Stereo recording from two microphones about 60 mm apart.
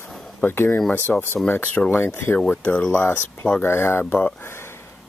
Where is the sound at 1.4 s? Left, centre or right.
Left.